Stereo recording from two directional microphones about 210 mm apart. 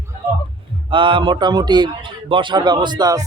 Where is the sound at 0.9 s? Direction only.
25° right (ahead or behind).